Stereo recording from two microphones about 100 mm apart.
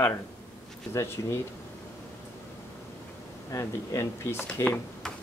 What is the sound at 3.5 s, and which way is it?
Speech, 35° left (ahead or behind).